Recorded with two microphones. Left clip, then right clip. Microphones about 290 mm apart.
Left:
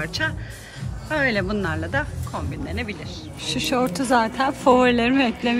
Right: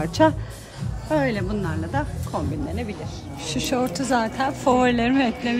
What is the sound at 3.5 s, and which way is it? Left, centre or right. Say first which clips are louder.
Speech: left 2 dB; centre.